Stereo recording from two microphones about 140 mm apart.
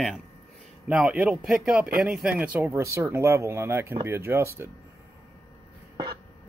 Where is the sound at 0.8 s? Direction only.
10° right (ahead or behind).